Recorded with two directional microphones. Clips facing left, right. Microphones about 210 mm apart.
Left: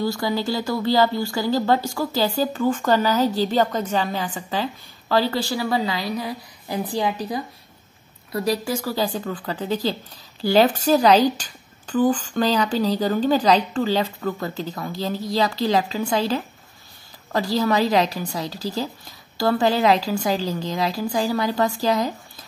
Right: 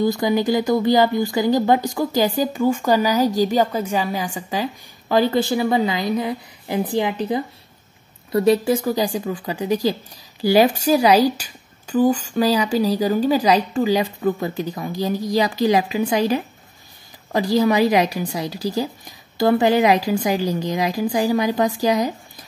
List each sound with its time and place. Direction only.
0.0 s speech: 15° right (ahead or behind)